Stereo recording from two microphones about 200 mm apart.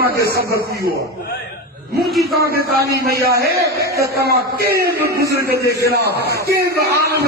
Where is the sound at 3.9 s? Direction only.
15° right (ahead or behind).